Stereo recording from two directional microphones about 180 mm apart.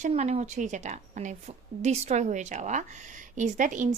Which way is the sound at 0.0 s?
40° right (ahead or behind).